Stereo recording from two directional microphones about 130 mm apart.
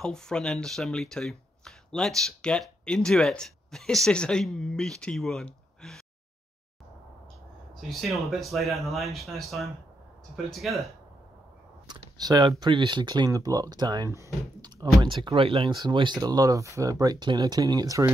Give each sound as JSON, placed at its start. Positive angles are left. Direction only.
{"t": 0.0, "sound": "speech", "side_deg": 5}
{"t": 7.9, "sound": "speech", "side_deg": 0}
{"t": 11.9, "sound": "speech", "side_deg": -30}
{"t": 15.0, "sound": "speech", "side_deg": -40}